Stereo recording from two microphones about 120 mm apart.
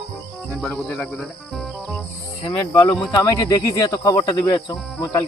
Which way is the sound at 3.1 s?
30° left (ahead or behind).